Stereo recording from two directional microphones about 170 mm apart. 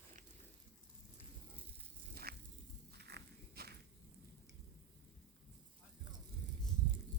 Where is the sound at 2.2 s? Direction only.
65° right (ahead or behind).